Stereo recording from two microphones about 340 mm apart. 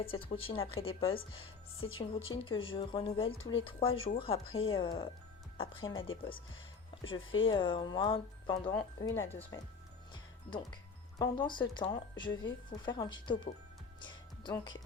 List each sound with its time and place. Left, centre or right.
0.0 s speech: centre
7.0 s speech: left
7.5 s speech: centre
11.2 s speech: centre
14.0 s music: centre